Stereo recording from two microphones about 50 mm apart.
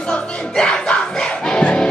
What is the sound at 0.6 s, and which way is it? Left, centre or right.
Music, centre.